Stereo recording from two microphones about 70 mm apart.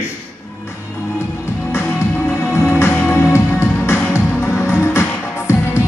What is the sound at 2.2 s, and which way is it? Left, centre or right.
Music, left.